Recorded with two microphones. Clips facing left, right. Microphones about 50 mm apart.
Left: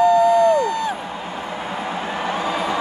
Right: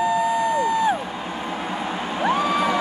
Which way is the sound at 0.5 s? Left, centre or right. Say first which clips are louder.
Even; centre.